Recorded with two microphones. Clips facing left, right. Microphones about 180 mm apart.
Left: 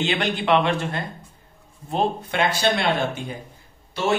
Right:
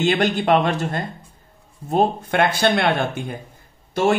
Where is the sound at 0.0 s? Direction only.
45° right (ahead or behind).